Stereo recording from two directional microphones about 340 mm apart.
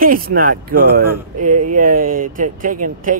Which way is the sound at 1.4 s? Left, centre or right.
Right.